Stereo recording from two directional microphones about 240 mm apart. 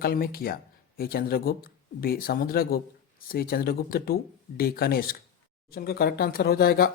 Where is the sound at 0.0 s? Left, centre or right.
Left.